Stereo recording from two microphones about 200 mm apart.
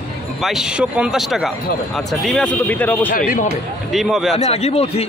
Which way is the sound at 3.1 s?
45° left (ahead or behind).